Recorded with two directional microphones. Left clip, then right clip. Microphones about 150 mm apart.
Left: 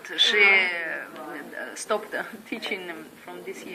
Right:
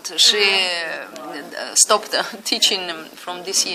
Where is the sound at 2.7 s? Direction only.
65° right (ahead or behind).